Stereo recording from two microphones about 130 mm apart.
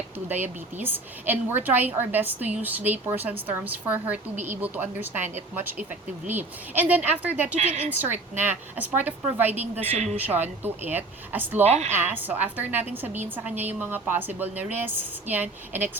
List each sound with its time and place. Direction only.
0.3 s a woman's voice: 15° right (ahead or behind)
9.9 s speech: 60° right (ahead or behind)
10.2 s a woman's voice: 15° right (ahead or behind)
11.6 s speech: 60° right (ahead or behind)
12.1 s a woman's voice: 15° right (ahead or behind)